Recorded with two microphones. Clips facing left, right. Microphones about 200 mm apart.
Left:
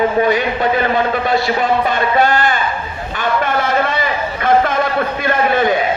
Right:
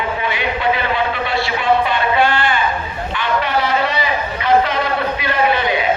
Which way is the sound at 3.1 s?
45° left (ahead or behind).